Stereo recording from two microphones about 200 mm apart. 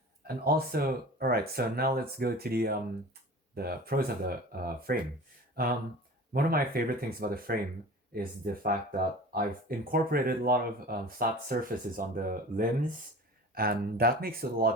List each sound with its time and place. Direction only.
0.3 s speech: 50° right (ahead or behind)